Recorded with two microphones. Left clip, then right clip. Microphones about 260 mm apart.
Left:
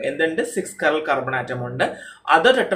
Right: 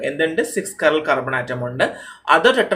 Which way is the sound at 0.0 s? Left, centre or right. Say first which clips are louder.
Right 2 dB; centre.